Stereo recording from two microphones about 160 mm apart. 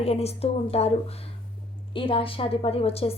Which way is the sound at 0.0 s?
40° left (ahead or behind).